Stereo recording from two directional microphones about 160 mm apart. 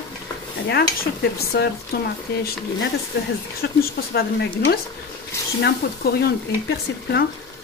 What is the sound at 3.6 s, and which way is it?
Speech, 75° left (ahead or behind).